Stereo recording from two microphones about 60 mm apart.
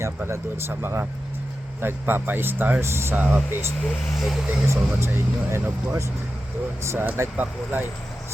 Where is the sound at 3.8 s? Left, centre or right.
Centre.